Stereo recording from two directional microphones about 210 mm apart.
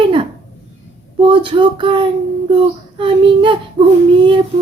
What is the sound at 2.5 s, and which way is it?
Child singing, 25° right (ahead or behind).